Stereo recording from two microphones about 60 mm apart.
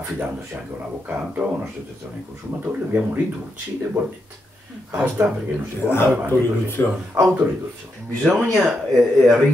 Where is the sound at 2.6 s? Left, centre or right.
Right.